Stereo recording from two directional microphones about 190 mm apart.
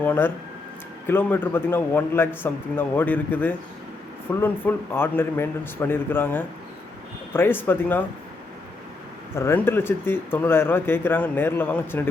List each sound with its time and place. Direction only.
0.0 s speech: 10° left (ahead or behind)
9.3 s speech: 15° left (ahead or behind)